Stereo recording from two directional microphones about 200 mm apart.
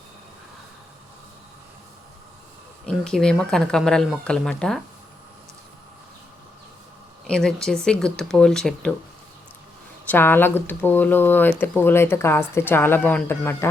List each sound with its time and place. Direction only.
2.8 s speech: 5° left (ahead or behind)
7.3 s speech: 5° left (ahead or behind)
10.1 s speech: 10° left (ahead or behind)